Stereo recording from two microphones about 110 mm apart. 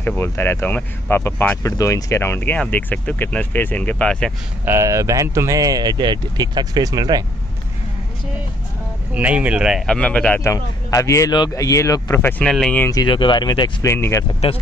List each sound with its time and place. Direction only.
0.0 s speech: 20° left (ahead or behind)
4.6 s speech: 25° right (ahead or behind)
9.1 s speech: 10° right (ahead or behind)
9.8 s speech: 10° left (ahead or behind)
10.4 s speech: 30° left (ahead or behind)
12.4 s speech: 5° left (ahead or behind)
12.9 s speech: 45° left (ahead or behind)
13.8 s speech: 25° left (ahead or behind)
14.4 s speech: 75° left (ahead or behind)